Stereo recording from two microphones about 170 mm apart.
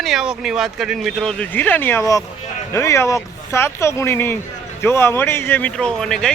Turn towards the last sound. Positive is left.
turn(degrees=5)  # may be behind; listen again after turning